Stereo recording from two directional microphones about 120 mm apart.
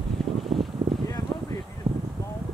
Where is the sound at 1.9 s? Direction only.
50° right (ahead or behind).